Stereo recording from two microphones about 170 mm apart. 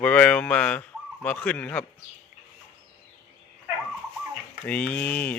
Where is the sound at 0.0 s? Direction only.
5° left (ahead or behind).